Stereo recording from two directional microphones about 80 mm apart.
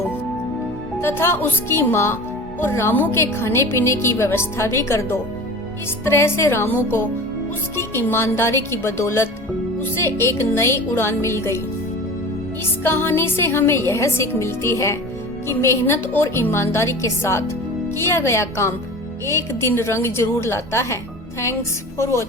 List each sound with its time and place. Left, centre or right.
1.0 s a woman's voice: left
7.8 s a woman's voice: left
12.8 s a woman's voice: left